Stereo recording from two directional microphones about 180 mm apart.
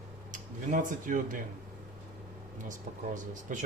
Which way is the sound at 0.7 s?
45° right (ahead or behind).